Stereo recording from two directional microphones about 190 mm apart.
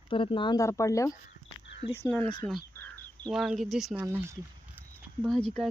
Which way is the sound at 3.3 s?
Centre (ahead or behind).